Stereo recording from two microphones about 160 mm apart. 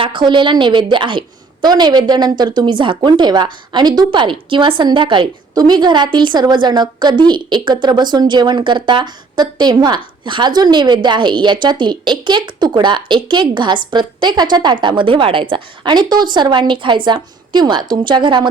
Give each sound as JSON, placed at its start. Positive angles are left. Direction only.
{"t": 0.0, "sound": "a woman's voice", "side_deg": -30}